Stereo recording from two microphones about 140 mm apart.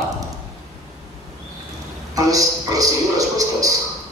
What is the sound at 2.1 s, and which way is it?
A man's voice, 25° right (ahead or behind).